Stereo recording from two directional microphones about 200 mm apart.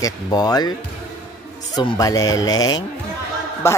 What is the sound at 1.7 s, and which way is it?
Speech, 20° left (ahead or behind).